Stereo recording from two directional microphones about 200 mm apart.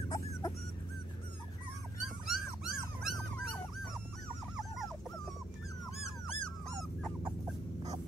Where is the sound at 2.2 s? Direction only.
Centre (ahead or behind).